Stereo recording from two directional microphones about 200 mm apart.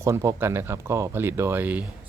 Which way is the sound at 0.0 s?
15° right (ahead or behind).